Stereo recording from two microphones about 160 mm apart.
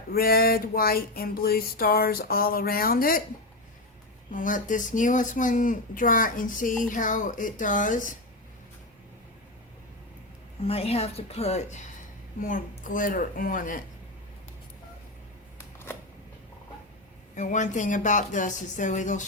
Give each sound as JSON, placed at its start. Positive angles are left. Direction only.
{"t": 0.1, "sound": "a sound", "side_deg": 70}
{"t": 4.4, "sound": "speech", "side_deg": 55}
{"t": 10.6, "sound": "a woman's voice", "side_deg": 40}
{"t": 12.5, "sound": "speech", "side_deg": 55}
{"t": 17.3, "sound": "speech", "side_deg": 50}